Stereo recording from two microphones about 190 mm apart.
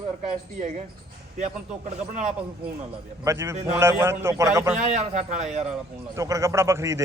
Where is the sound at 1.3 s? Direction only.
40° right (ahead or behind).